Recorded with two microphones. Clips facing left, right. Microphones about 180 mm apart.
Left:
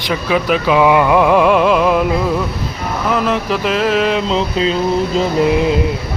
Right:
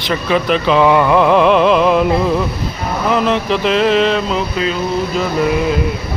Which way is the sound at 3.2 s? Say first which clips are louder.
Right 2 dB; 5° left (ahead or behind).